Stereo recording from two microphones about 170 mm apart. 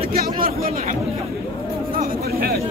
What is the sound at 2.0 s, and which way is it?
Chatter, 60° right (ahead or behind).